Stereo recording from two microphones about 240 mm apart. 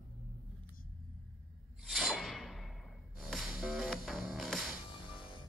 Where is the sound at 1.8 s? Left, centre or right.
Centre.